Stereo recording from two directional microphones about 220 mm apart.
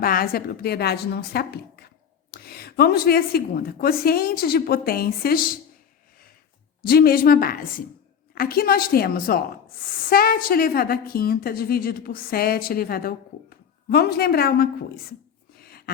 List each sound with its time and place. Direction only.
0.0 s a woman's voice: 40° left (ahead or behind)
6.8 s a woman's voice: 45° left (ahead or behind)
15.5 s a sound: 45° left (ahead or behind)